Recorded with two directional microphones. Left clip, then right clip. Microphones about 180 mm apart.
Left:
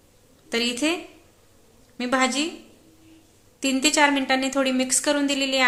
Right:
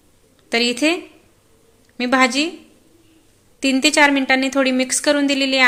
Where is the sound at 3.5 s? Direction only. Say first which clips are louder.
Right 6 dB; 15° right (ahead or behind).